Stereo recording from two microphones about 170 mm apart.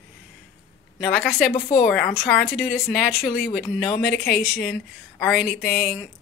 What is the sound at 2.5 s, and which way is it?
Speech, centre (ahead or behind).